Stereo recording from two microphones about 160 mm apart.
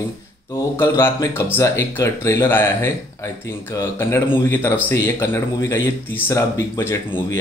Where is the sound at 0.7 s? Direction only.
15° left (ahead or behind).